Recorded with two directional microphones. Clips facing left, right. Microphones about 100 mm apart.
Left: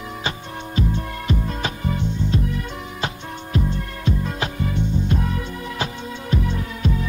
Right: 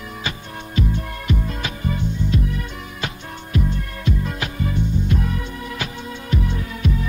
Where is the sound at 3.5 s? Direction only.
30° left (ahead or behind).